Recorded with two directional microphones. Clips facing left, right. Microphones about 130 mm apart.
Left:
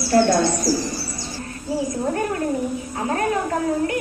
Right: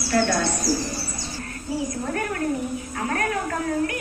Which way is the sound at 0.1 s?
30° left (ahead or behind).